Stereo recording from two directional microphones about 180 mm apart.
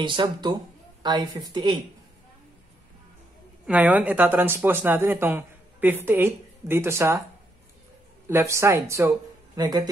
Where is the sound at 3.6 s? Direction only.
10° right (ahead or behind).